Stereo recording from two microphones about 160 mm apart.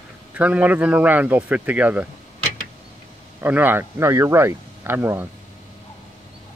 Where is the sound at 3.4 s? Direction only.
10° right (ahead or behind).